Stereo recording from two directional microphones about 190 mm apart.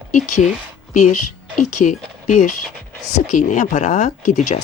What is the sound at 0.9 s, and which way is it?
Speech, 40° left (ahead or behind).